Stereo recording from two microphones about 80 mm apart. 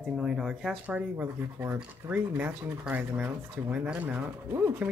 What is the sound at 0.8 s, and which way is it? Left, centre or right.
Speech, right.